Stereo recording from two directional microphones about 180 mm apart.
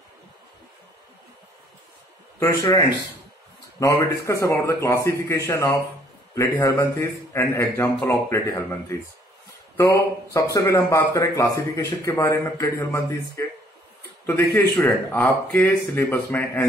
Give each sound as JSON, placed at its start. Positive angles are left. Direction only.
{"t": 2.4, "sound": "speech", "side_deg": 15}
{"t": 3.8, "sound": "speech", "side_deg": 15}